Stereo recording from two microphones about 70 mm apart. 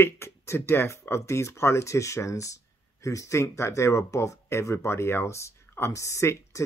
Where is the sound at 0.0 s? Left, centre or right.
Left.